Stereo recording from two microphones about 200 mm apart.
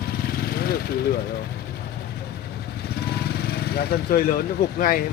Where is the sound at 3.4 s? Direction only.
50° left (ahead or behind).